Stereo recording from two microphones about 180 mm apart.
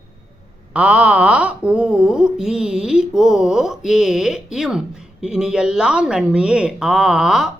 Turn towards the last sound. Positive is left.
turn(degrees=-5)  # may be behind; listen again after turning